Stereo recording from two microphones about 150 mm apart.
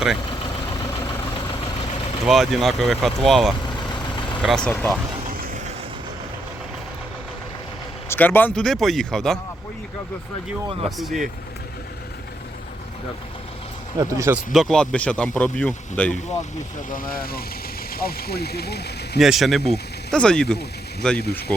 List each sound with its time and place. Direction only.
0.7 s vehicle: 20° left (ahead or behind)
1.2 s vehicle: 35° left (ahead or behind)
2.2 s speech: centre (ahead or behind)
3.8 s vehicle: 30° left (ahead or behind)
4.4 s speech: 5° left (ahead or behind)
8.1 s speech: 15° left (ahead or behind)
10.8 s speech: centre (ahead or behind)
14.0 s speech: 20° right (ahead or behind)
14.5 s speech: centre (ahead or behind)
16.9 s speech: 70° left (ahead or behind); by 19.2 s 90° left
19.2 s speech: centre (ahead or behind)